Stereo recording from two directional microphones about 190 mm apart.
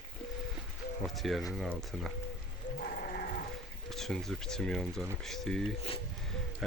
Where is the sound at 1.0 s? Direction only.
Centre (ahead or behind).